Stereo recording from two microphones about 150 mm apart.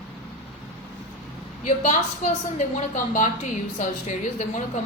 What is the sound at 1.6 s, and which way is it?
A woman's voice, 55° left (ahead or behind).